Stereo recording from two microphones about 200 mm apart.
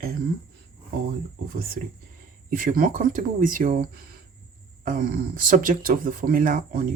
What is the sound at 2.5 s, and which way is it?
Speech, 45° right (ahead or behind).